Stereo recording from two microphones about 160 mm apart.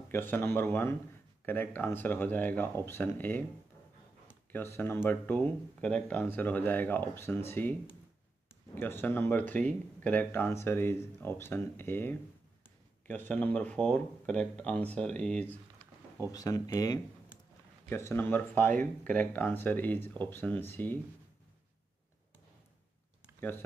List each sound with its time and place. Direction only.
0.1 s speech: 15° left (ahead or behind)
8.7 s speech: 15° left (ahead or behind)
16.3 s speech: 20° left (ahead or behind)